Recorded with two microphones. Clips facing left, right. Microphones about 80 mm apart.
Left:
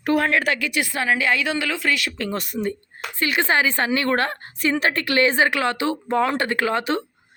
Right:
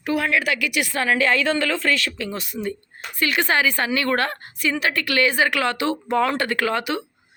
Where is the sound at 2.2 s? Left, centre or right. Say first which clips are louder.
Left 3 dB; left.